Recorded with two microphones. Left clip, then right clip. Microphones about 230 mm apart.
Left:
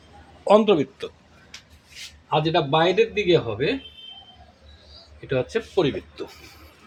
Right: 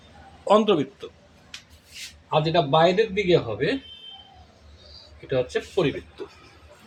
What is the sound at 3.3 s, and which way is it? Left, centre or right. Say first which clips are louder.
Speech: left 1 dB; left.